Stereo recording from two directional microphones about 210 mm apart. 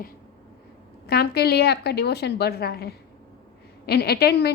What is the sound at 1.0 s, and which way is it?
A woman's voice, 50° left (ahead or behind).